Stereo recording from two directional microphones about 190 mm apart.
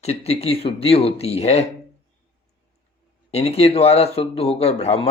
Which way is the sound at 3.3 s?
35° left (ahead or behind).